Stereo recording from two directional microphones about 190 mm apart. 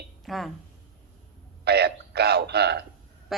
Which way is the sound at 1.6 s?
60° right (ahead or behind).